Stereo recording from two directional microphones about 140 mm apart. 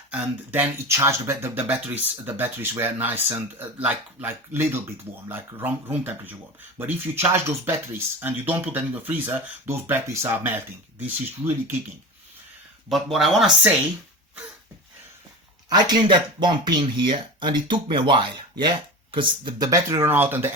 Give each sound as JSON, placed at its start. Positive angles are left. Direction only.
{"t": 0.1, "sound": "speech", "side_deg": -10}
{"t": 12.9, "sound": "speech", "side_deg": 0}
{"t": 15.7, "sound": "speech", "side_deg": -30}